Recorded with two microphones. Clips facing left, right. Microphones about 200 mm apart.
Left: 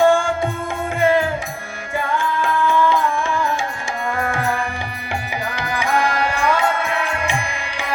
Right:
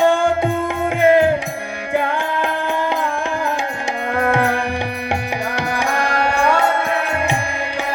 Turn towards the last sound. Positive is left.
turn(degrees=-60)  # may be behind; listen again after turning